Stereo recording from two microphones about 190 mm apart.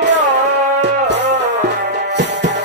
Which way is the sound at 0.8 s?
65° right (ahead or behind).